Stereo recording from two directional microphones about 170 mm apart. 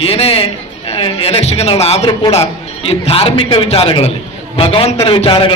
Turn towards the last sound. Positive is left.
turn(degrees=30)  # may be behind; listen again after turning